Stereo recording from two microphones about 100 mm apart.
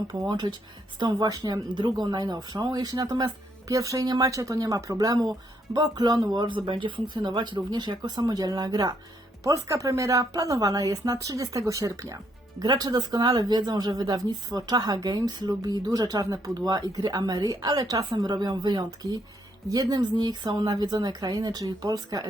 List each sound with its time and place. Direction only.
0.1 s speech: 40° right (ahead or behind)